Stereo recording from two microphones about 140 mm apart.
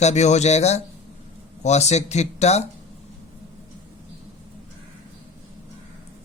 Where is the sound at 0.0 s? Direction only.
55° left (ahead or behind).